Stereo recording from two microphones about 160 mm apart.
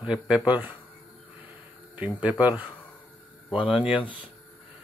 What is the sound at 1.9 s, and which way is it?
Speech, 10° right (ahead or behind).